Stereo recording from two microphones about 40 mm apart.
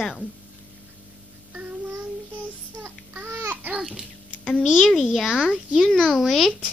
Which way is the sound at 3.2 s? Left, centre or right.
Right.